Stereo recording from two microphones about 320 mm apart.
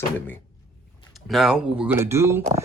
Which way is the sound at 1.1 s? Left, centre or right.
Centre.